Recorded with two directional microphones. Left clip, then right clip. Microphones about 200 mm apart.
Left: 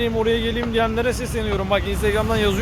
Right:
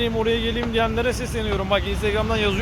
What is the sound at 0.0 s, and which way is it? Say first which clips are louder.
Speech: left 2 dB; 10° left (ahead or behind).